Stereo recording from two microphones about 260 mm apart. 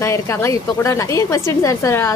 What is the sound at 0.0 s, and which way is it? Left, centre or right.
Speech, centre.